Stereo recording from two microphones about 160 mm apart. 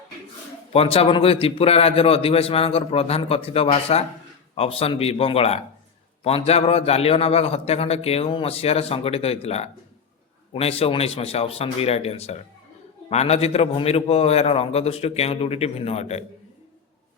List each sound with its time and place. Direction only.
0.7 s a man's voice: 40° left (ahead or behind)